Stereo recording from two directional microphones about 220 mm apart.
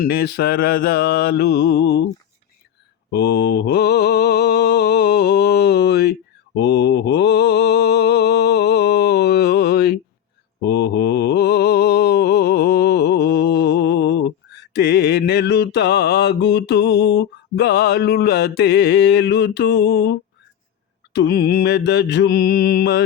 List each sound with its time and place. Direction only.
0.0 s mantra: 45° left (ahead or behind)
3.1 s mantra: 50° left (ahead or behind)